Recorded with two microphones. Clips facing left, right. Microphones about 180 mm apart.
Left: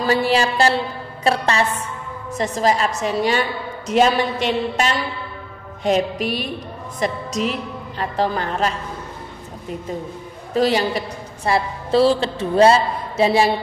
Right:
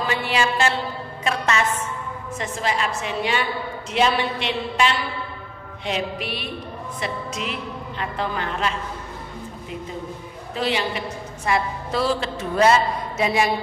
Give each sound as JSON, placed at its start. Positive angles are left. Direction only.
{"t": 0.0, "sound": "a woman's voice", "side_deg": 40}
{"t": 5.9, "sound": "music", "side_deg": 45}
{"t": 7.0, "sound": "a woman's voice", "side_deg": 40}
{"t": 10.5, "sound": "a woman's voice", "side_deg": 40}